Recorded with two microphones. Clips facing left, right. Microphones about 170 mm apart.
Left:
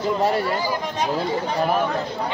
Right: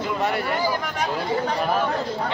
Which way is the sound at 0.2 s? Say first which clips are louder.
Left 2 dB; 30° left (ahead or behind).